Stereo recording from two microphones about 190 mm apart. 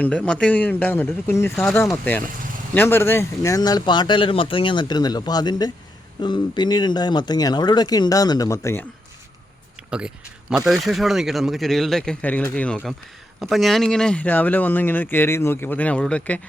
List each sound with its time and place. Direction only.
0.0 s speech: 5° left (ahead or behind)
10.7 s speech: centre (ahead or behind)